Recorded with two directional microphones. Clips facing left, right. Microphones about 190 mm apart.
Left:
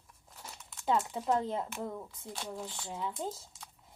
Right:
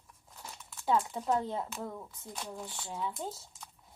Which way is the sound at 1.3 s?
20° left (ahead or behind).